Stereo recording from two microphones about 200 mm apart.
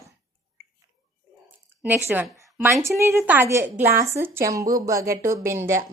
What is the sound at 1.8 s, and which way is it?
Speech, 10° right (ahead or behind).